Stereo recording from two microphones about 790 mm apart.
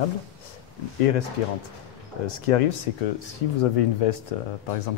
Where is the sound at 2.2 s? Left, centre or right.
Left.